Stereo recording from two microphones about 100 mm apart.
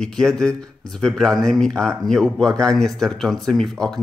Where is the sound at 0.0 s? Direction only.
5° left (ahead or behind).